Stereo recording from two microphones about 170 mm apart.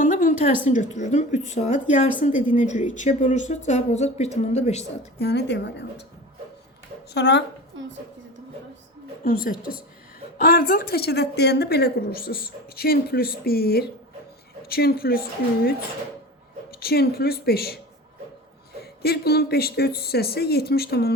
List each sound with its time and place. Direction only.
0.0 s a sound: 50° left (ahead or behind)
0.6 s speech: 45° left (ahead or behind)
5.2 s a woman's voice: 80° left
7.1 s a woman's voice: 85° left
9.2 s a woman's voice: 60° left (ahead or behind)
16.8 s a woman's voice: 65° left (ahead or behind)
18.8 s speech: 65° left (ahead or behind)